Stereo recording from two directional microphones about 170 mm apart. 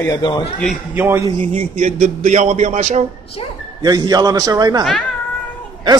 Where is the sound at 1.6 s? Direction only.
40° right (ahead or behind).